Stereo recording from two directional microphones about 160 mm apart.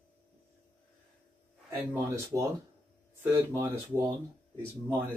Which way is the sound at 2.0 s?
20° right (ahead or behind).